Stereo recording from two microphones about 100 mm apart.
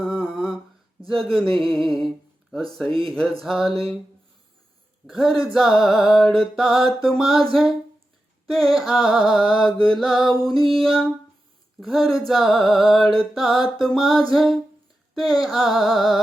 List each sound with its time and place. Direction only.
0.0 s humming: centre (ahead or behind)
1.0 s music: centre (ahead or behind)
3.7 s speech: 70° right (ahead or behind)
5.0 s music: centre (ahead or behind)